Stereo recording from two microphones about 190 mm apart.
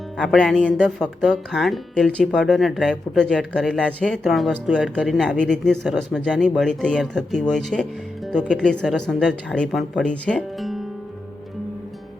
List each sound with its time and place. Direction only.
0.2 s speech: centre (ahead or behind)